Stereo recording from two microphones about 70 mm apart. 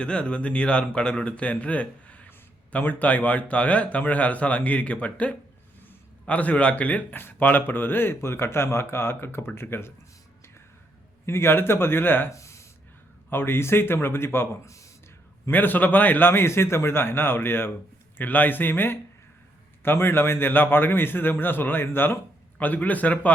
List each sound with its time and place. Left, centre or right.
0.0 s a man's voice: centre; by 9.9 s left
11.3 s speech: left
12.3 s a sound: left
13.3 s speech: left
15.4 s a man's voice: left